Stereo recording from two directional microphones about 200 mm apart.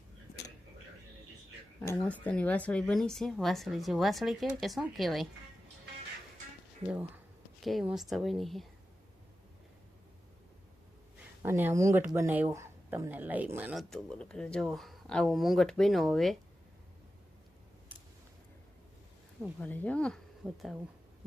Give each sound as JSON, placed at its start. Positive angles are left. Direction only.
{"t": 1.8, "sound": "speech", "side_deg": 10}
{"t": 6.8, "sound": "speech", "side_deg": -10}
{"t": 7.6, "sound": "speech", "side_deg": 0}
{"t": 11.4, "sound": "speech", "side_deg": -10}
{"t": 13.9, "sound": "speech", "side_deg": 5}
{"t": 19.5, "sound": "speech", "side_deg": 10}